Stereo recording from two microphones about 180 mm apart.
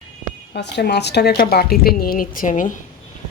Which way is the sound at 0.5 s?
70° left (ahead or behind).